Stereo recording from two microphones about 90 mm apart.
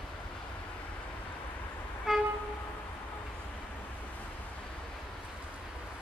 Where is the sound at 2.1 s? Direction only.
5° right (ahead or behind).